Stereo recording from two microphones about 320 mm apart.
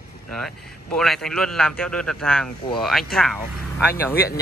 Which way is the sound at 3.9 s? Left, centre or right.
Left.